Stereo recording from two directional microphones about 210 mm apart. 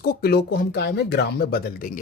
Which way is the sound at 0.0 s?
45° left (ahead or behind).